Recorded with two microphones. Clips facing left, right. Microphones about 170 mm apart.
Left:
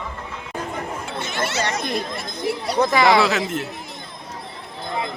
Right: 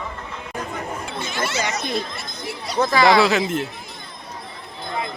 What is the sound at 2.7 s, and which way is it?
Speech, 20° left (ahead or behind).